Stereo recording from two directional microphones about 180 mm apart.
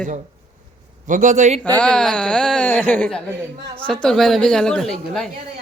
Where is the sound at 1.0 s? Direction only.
45° right (ahead or behind).